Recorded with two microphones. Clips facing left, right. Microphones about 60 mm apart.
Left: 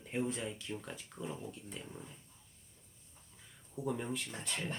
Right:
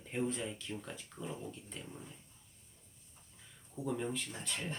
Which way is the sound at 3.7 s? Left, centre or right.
Centre.